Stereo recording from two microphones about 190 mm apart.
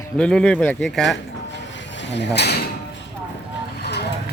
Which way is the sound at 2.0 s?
65° left (ahead or behind).